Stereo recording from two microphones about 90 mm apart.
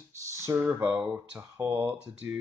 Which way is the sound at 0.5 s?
20° right (ahead or behind).